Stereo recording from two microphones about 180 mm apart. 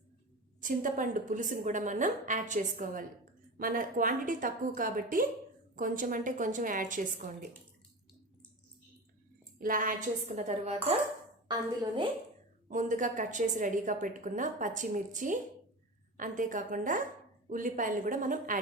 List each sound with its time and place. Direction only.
0.6 s a woman's voice: 45° right (ahead or behind)
9.6 s a woman's voice: 50° right (ahead or behind)
11.4 s a woman's voice: 25° right (ahead or behind)
12.6 s a woman's voice: 45° right (ahead or behind)